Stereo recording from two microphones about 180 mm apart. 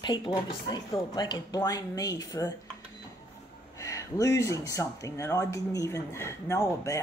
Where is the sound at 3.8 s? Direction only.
15° left (ahead or behind).